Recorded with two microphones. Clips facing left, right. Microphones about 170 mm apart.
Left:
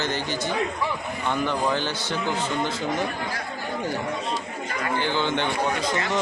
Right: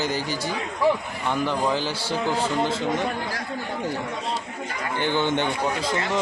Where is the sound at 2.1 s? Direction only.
35° right (ahead or behind).